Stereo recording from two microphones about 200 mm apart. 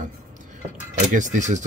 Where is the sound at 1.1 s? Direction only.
40° right (ahead or behind).